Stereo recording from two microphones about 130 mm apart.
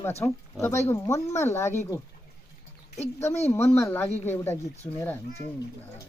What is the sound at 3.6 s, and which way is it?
Speech, 20° left (ahead or behind).